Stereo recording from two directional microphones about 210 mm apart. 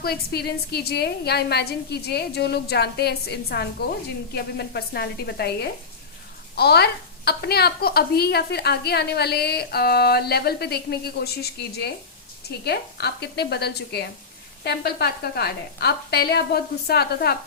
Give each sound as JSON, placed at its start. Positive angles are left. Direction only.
{"t": 0.0, "sound": "speech", "side_deg": 50}